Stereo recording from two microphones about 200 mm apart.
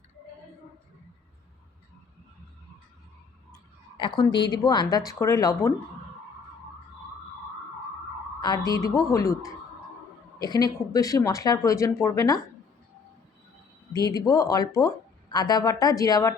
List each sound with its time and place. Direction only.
3.9 s speech: 25° left (ahead or behind)
8.4 s speech: 20° left (ahead or behind)
13.9 s speech: 20° left (ahead or behind)